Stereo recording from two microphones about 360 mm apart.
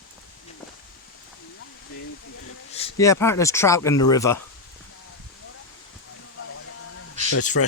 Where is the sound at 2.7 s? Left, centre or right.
Centre.